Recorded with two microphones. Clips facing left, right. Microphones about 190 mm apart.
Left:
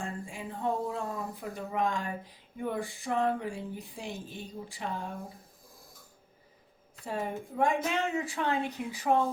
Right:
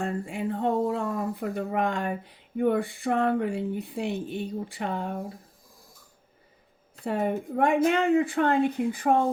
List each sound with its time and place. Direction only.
0.0 s speech: 65° right (ahead or behind)
7.0 s a woman's voice: 65° right (ahead or behind)